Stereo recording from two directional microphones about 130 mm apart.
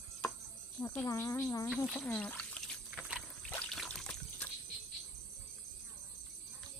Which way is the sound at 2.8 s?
5° right (ahead or behind).